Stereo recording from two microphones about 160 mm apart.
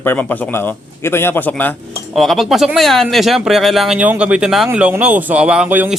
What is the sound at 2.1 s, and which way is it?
A man's voice, centre (ahead or behind).